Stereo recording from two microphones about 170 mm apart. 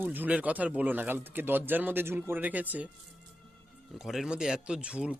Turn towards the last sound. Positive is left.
turn(degrees=-5)  # may be behind; listen again after turning